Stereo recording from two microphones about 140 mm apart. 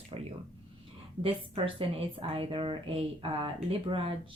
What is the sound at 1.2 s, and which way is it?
A woman's voice, 40° right (ahead or behind).